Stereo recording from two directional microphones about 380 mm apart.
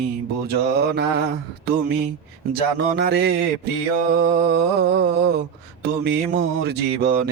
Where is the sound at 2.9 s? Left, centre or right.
Right.